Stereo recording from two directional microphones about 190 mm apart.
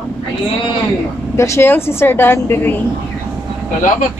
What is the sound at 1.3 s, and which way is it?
A woman's voice, 15° left (ahead or behind).